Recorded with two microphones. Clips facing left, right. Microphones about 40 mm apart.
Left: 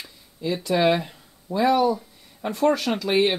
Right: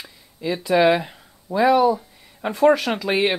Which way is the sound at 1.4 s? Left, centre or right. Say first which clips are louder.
Right 3 dB; centre.